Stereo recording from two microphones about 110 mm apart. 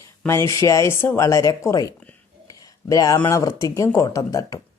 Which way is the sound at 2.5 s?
30° left (ahead or behind).